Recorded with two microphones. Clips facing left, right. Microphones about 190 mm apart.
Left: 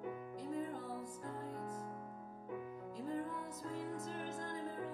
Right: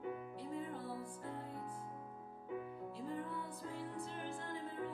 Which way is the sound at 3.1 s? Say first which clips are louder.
Left 4 dB; 40° left (ahead or behind).